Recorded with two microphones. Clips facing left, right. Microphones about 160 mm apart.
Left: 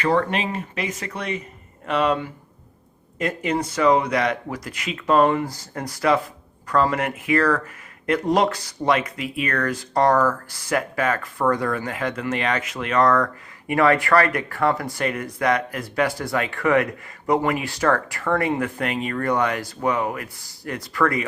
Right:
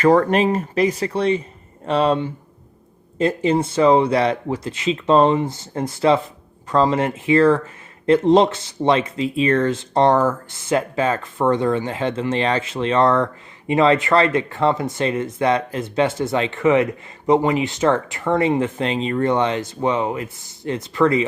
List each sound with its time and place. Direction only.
0.0 s speech: 40° right (ahead or behind); by 21.2 s 25° right (ahead or behind)